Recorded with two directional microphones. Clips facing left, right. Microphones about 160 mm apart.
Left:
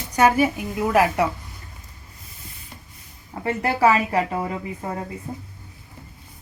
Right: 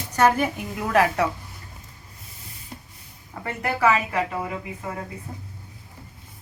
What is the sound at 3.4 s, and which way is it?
A woman's voice, 30° left (ahead or behind).